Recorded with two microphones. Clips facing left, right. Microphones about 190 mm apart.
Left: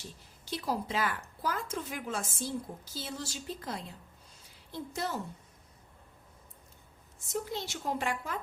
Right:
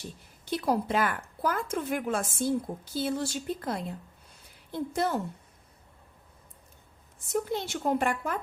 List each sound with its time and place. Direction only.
0.4 s speech: 60° right (ahead or behind)
7.5 s speech: 55° right (ahead or behind)